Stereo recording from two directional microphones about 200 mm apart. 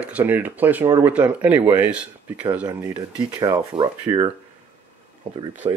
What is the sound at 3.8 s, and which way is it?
Speech, 25° right (ahead or behind).